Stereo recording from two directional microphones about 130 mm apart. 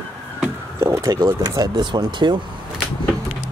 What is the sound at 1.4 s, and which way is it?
Speech, 30° right (ahead or behind).